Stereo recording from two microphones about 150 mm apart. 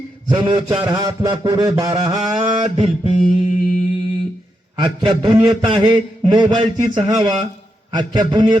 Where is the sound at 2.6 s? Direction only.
40° right (ahead or behind).